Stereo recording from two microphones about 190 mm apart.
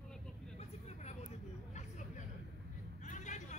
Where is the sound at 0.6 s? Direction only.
35° left (ahead or behind).